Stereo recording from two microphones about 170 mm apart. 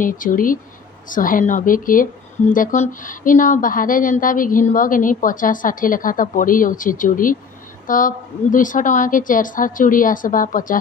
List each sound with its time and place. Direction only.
0.0 s a woman's voice: 55° left (ahead or behind)